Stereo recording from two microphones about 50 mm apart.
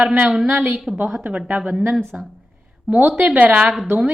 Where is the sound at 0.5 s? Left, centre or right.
Right.